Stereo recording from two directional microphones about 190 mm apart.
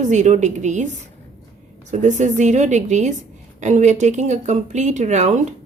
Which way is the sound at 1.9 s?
40° right (ahead or behind).